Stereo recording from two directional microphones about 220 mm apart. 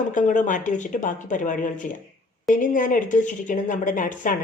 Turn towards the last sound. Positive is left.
turn(degrees=35)  # may be behind; listen again after turning